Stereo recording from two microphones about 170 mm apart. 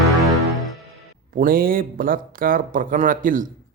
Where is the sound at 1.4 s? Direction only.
60° right (ahead or behind).